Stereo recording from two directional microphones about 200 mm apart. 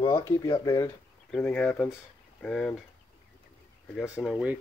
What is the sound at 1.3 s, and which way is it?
Speech, 5° left (ahead or behind).